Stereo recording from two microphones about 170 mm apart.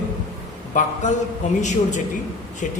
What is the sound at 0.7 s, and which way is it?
Speech, 45° left (ahead or behind).